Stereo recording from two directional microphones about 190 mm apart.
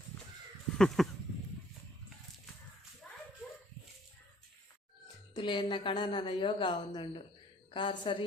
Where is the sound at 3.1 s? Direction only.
5° left (ahead or behind).